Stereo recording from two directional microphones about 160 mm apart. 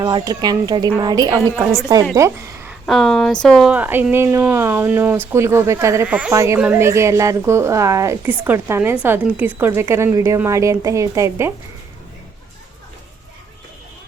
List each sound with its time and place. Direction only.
0.0 s a woman's voice: 25° right (ahead or behind)
2.8 s speech: centre (ahead or behind); by 11.5 s 20° right (ahead or behind)